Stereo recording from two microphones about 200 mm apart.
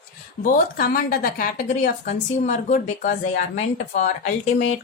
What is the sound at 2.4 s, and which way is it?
Speech, 35° left (ahead or behind).